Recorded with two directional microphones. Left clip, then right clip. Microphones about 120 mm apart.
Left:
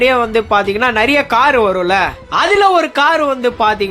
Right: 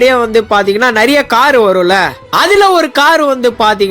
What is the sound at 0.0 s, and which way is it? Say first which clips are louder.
Speech: right 4 dB; 25° right (ahead or behind).